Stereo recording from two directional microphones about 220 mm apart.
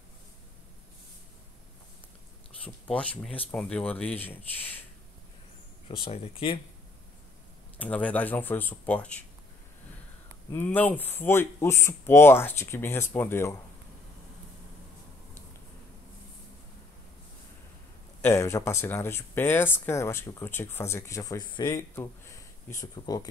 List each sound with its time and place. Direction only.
3.5 s speech: 5° left (ahead or behind)
5.9 s speech: 25° left (ahead or behind)
7.8 s speech: 5° left (ahead or behind)
10.5 s speech: 10° left (ahead or behind)
18.2 s speech: 15° left (ahead or behind)